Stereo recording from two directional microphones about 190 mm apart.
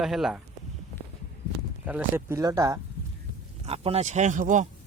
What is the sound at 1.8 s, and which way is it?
Speech, 10° right (ahead or behind).